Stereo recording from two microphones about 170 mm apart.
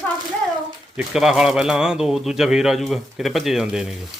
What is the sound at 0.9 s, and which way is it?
A man's voice, 5° right (ahead or behind).